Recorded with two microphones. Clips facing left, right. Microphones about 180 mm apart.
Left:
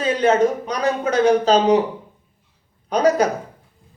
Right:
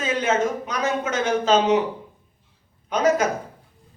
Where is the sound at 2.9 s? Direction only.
35° left (ahead or behind).